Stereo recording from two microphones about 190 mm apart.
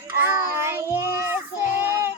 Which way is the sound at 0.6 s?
15° right (ahead or behind).